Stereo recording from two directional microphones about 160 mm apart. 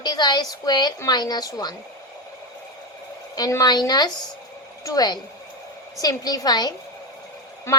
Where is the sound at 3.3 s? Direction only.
25° left (ahead or behind).